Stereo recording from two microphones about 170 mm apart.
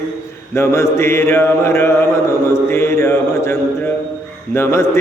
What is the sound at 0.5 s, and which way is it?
Mantra, 15° left (ahead or behind).